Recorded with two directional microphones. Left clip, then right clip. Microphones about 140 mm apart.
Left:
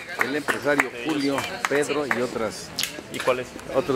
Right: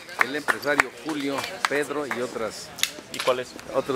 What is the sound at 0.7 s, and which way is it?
Speech, 5° right (ahead or behind).